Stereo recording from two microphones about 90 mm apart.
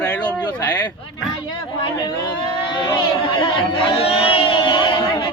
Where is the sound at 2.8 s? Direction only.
65° left (ahead or behind).